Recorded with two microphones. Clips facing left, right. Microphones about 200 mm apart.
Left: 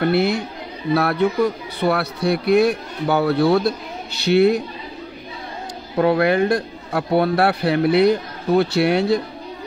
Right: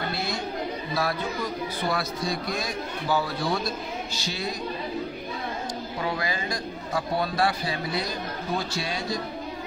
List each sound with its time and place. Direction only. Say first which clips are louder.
0.0 s a man's voice: left 12 dB; 65° left (ahead or behind)
5.9 s a man's voice: left 15 dB; 60° left (ahead or behind)